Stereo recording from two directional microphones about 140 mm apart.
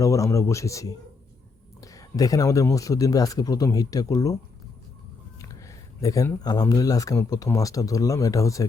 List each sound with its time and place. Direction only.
0.0 s speech: 25° left (ahead or behind)
5.4 s speech: 25° left (ahead or behind)